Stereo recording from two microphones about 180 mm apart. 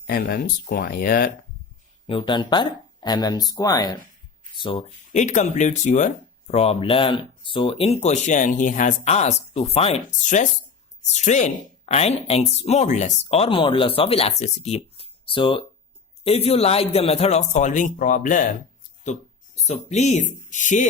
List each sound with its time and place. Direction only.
0.1 s speech: 55° left (ahead or behind)
2.0 s speech: 30° left (ahead or behind)
5.1 s speech: 40° left (ahead or behind)
19.5 s speech: 40° left (ahead or behind)